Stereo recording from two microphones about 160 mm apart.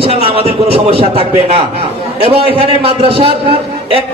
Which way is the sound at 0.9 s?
35° right (ahead or behind).